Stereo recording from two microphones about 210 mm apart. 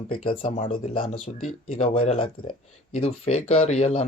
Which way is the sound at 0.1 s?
25° left (ahead or behind).